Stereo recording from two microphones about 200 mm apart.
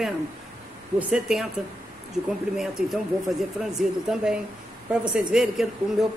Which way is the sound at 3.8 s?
5° right (ahead or behind).